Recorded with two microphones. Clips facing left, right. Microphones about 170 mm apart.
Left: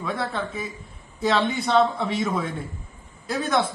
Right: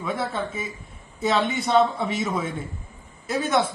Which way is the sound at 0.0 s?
5° right (ahead or behind).